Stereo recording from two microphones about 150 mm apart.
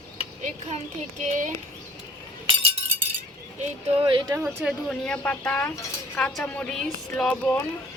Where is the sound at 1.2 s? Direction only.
55° right (ahead or behind).